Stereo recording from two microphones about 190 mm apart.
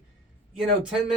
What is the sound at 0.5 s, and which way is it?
Speech, centre (ahead or behind).